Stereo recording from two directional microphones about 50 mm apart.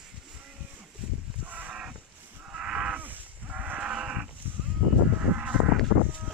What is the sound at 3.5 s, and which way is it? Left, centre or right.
Livestock, right.